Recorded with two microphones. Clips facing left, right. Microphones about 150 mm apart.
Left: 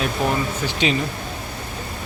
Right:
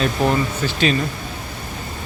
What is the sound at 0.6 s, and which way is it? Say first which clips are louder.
Speech: right 2 dB; 20° left (ahead or behind).